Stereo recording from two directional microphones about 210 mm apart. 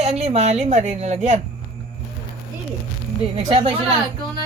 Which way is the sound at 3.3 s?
25° right (ahead or behind).